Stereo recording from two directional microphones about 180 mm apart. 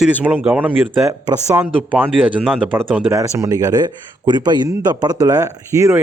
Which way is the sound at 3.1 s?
20° right (ahead or behind).